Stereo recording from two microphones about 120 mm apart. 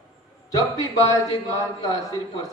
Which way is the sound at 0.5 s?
30° left (ahead or behind).